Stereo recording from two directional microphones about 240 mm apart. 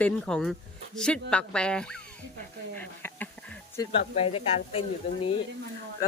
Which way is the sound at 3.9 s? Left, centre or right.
Left.